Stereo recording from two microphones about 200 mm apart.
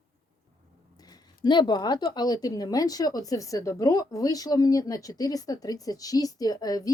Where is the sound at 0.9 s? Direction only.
20° left (ahead or behind).